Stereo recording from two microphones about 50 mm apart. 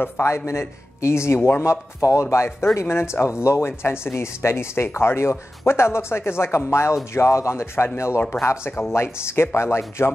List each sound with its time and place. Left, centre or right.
0.0 s speech: left
2.3 s speech: left
8.2 s speech: left